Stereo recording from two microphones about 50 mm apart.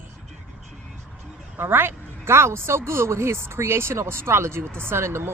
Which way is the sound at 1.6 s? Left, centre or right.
Right.